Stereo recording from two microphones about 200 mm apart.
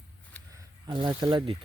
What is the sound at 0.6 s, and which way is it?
Speech, 20° right (ahead or behind).